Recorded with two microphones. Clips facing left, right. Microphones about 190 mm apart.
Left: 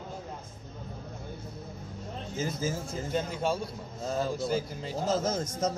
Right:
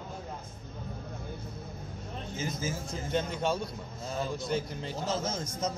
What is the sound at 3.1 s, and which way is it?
Speech, 5° left (ahead or behind).